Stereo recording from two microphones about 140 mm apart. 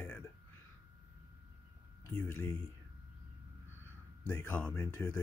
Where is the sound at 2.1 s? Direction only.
15° left (ahead or behind).